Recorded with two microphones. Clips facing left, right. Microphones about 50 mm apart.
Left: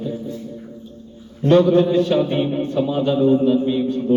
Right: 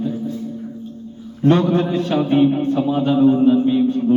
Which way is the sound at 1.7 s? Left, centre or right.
Centre.